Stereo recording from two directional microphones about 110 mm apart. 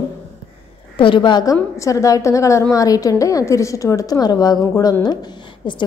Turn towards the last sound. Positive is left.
turn(degrees=45)  # may be behind; listen again after turning